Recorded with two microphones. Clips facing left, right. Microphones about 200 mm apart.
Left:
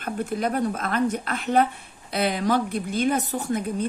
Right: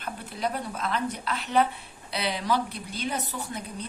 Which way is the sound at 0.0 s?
50° left (ahead or behind).